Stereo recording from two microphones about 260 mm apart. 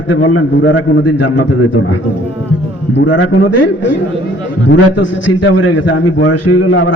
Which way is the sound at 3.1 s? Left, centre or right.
Left.